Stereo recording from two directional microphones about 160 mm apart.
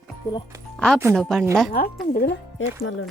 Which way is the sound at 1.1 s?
Centre (ahead or behind).